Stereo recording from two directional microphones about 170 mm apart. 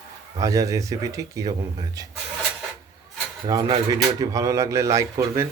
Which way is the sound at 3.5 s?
25° right (ahead or behind).